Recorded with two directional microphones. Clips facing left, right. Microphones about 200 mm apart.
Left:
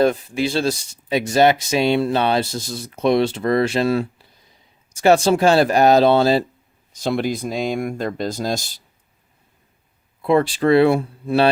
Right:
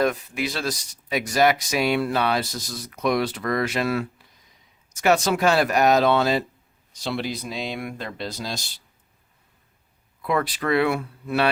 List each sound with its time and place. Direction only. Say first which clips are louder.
0.0 s speech: left 6 dB; 30° left (ahead or behind)
6.9 s speech: left 7 dB; 45° left (ahead or behind)
10.2 s speech: left 8 dB; 30° left (ahead or behind)